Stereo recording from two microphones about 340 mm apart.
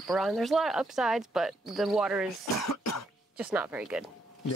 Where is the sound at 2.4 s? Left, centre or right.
Left.